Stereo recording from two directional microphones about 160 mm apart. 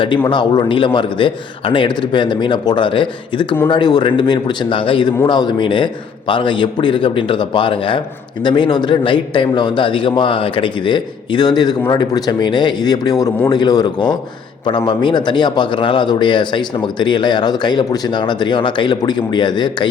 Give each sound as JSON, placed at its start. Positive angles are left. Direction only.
{"t": 0.0, "sound": "a man's voice", "side_deg": 30}